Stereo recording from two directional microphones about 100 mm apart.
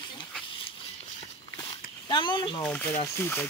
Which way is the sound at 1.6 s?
50° left (ahead or behind).